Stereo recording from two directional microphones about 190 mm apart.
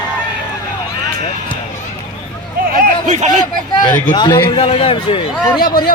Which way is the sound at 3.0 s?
40° right (ahead or behind).